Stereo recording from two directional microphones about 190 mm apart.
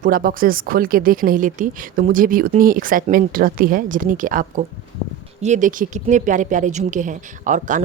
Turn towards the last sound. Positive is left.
turn(degrees=-40)  # may be behind; listen again after turning